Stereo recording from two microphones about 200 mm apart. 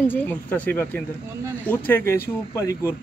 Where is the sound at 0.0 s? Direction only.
10° left (ahead or behind).